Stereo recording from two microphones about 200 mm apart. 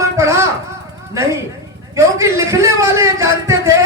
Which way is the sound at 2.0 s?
15° right (ahead or behind).